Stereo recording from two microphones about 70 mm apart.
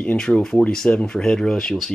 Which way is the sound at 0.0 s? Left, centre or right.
Centre.